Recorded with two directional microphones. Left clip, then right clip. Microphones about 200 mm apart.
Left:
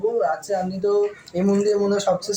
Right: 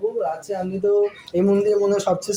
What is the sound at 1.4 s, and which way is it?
Speech, 45° right (ahead or behind).